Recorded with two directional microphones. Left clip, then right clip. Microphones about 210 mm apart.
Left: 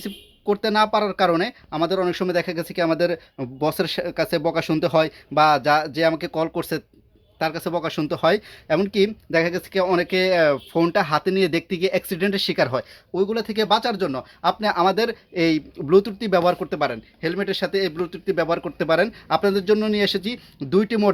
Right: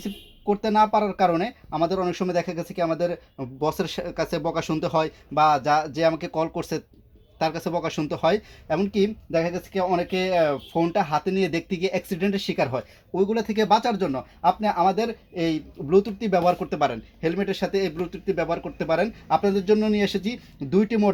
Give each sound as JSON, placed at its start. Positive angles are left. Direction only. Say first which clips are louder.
{"t": 0.0, "sound": "speech", "louder": "left 2 dB", "side_deg": 15}